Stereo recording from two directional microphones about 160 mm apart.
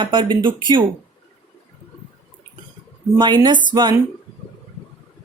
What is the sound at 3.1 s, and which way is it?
Speech, 25° right (ahead or behind).